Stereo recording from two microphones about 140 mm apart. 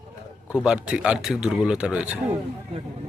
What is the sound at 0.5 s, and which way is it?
A man's voice, 5° right (ahead or behind).